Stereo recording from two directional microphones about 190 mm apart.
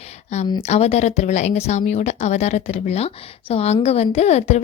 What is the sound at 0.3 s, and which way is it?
A woman's voice, 35° left (ahead or behind).